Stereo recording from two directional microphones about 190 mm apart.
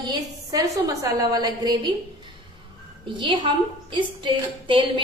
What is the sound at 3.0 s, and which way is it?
A woman's voice, 25° right (ahead or behind).